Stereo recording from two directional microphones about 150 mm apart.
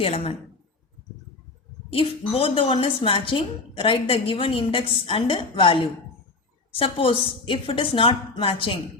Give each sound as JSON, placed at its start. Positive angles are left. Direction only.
{"t": 0.0, "sound": "a woman's voice", "side_deg": 40}
{"t": 1.9, "sound": "a woman's voice", "side_deg": 40}